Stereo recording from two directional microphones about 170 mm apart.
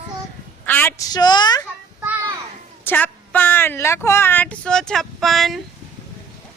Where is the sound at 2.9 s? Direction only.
10° left (ahead or behind).